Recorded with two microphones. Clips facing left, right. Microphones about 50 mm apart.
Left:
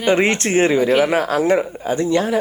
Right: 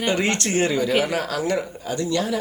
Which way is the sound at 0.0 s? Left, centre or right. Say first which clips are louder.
Left 6 dB; left.